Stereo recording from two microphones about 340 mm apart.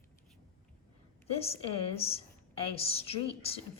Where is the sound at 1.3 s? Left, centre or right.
Centre.